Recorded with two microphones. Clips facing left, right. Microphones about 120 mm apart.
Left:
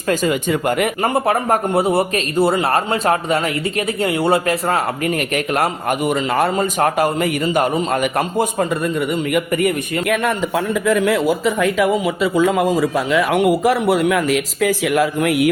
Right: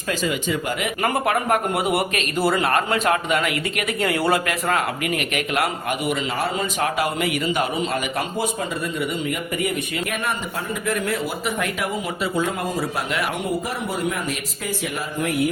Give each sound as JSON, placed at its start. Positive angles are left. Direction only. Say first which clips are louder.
{"t": 1.0, "sound": "a man's voice", "louder": "left 1 dB", "side_deg": 30}
{"t": 10.1, "sound": "a man's voice", "louder": "left 8 dB", "side_deg": 90}
{"t": 13.3, "sound": "a man's voice", "louder": "left 11 dB", "side_deg": 75}